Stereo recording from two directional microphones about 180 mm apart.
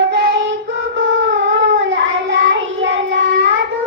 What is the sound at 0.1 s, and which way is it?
Child singing, 75° right (ahead or behind).